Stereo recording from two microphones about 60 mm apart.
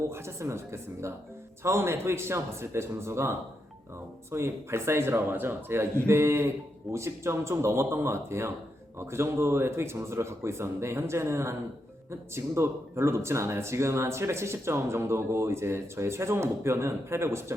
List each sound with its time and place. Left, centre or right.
0.0 s speech: right